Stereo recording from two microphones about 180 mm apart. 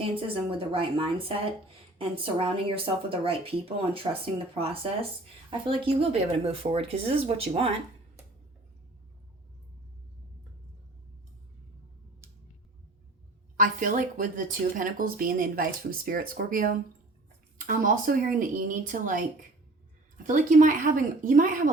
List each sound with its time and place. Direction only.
0.0 s speech: 30° right (ahead or behind)
13.6 s speech: 45° right (ahead or behind)
20.2 s speech: 45° right (ahead or behind)